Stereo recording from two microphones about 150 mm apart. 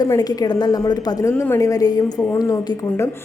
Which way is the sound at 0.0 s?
25° left (ahead or behind).